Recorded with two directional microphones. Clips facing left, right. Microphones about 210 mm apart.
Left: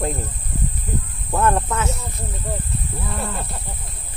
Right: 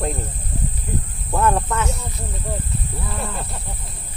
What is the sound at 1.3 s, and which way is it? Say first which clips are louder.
Speech: even; centre (ahead or behind).